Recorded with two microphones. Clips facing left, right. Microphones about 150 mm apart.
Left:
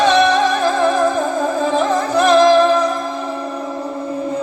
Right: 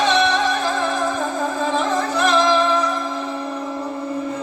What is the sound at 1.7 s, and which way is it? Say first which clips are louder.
Music: left 5 dB; 45° left (ahead or behind).